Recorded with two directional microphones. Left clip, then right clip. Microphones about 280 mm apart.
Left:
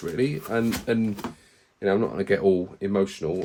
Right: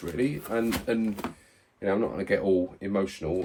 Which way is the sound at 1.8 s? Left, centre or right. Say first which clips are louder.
Left 4 dB; left.